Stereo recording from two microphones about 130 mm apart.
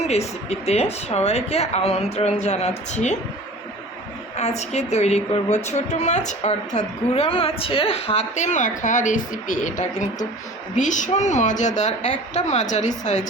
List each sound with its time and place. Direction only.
0.0 s a woman's voice: 55° left (ahead or behind)
4.4 s a woman's voice: 55° left (ahead or behind)